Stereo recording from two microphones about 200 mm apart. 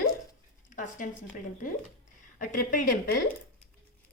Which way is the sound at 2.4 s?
40° left (ahead or behind).